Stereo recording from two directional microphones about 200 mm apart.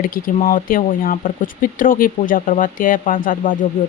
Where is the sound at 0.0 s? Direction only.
40° left (ahead or behind).